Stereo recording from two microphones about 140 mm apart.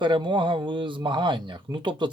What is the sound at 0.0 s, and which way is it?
Speech, 35° right (ahead or behind).